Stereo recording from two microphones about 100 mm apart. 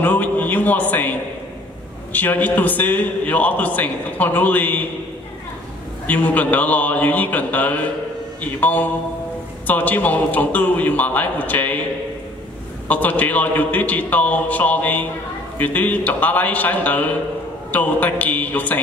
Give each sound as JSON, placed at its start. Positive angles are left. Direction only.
{"t": 0.0, "sound": "a sound", "side_deg": 15}
{"t": 2.1, "sound": "a man's voice", "side_deg": 15}
{"t": 6.0, "sound": "a man's voice", "side_deg": 15}
{"t": 12.8, "sound": "a man's voice", "side_deg": 15}